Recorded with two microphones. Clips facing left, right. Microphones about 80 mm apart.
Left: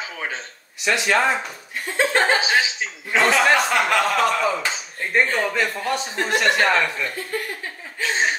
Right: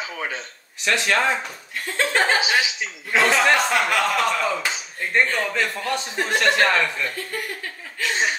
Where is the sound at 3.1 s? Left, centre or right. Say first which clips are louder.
Left 1 dB; centre.